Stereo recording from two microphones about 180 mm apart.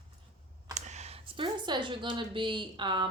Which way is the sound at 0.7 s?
40° right (ahead or behind).